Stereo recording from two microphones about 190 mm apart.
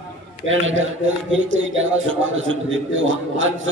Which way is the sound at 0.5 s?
90° right.